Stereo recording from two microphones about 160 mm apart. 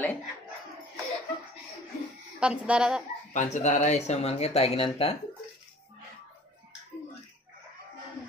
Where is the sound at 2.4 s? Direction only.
5° right (ahead or behind).